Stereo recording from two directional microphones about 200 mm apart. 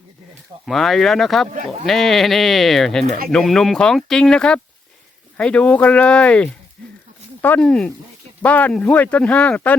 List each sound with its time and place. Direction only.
0.6 s speech: centre (ahead or behind)
1.5 s speech: 40° right (ahead or behind)
1.9 s speech: centre (ahead or behind)
6.8 s a sound: 5° left (ahead or behind)
7.4 s speech: 5° left (ahead or behind)